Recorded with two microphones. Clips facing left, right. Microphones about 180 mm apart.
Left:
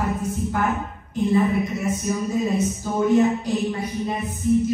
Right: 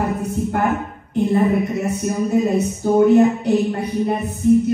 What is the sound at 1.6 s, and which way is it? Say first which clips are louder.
Speech: right 4 dB; 65° right (ahead or behind).